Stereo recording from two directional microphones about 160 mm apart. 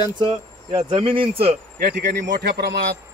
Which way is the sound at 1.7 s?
60° right (ahead or behind).